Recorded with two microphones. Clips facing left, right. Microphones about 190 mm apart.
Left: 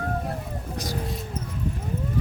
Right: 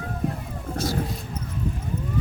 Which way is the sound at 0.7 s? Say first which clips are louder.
Right 6 dB; 15° left (ahead or behind).